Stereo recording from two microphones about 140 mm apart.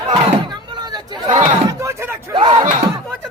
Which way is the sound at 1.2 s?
55° right (ahead or behind).